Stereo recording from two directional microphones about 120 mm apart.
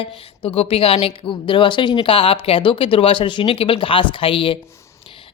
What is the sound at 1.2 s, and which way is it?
Speech, 45° left (ahead or behind).